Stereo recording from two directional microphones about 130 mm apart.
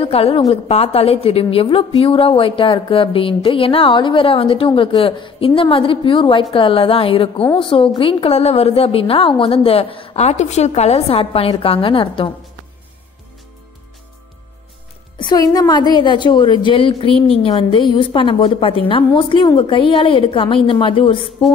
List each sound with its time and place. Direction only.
0.0 s speech: 50° left (ahead or behind)
15.1 s a woman's voice: 35° left (ahead or behind); by 21.5 s 50° left (ahead or behind)